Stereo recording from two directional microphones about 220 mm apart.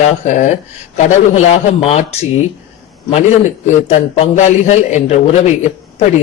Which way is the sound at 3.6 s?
30° left (ahead or behind).